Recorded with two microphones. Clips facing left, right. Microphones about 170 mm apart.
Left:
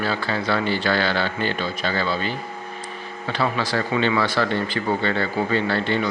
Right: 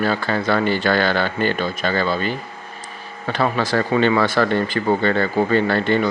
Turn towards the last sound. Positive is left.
turn(degrees=-50)  # may be behind; listen again after turning